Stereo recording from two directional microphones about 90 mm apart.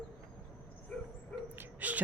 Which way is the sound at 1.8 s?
20° right (ahead or behind).